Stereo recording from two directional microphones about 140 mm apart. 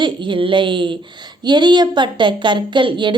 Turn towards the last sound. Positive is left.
turn(degrees=-35)  # may be behind; listen again after turning